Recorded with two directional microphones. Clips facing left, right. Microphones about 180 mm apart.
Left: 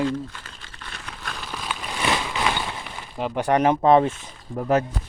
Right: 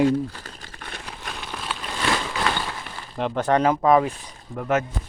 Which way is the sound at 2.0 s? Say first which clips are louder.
Even; 10° left (ahead or behind).